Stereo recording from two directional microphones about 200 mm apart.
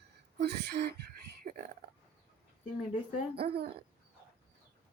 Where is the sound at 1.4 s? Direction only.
45° right (ahead or behind).